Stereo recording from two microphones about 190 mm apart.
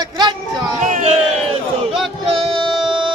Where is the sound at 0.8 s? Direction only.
40° right (ahead or behind).